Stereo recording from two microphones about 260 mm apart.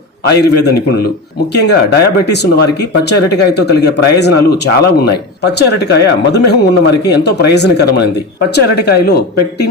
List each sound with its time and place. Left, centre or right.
0.3 s speech: left